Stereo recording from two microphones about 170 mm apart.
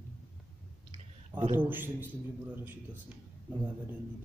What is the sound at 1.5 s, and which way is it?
Speech, 10° right (ahead or behind).